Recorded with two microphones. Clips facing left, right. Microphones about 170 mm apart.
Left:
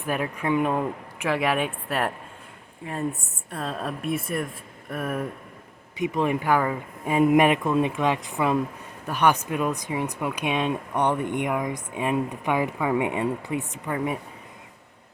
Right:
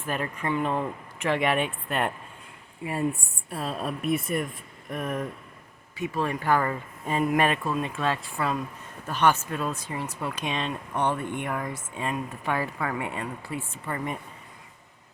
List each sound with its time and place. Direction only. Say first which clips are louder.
0.0 s speech: left 3 dB; 10° left (ahead or behind)
3.5 s speech: even; 5° right (ahead or behind)
6.0 s speech: left 4 dB; 20° left (ahead or behind)
13.9 s speech: left 5 dB; 5° left (ahead or behind)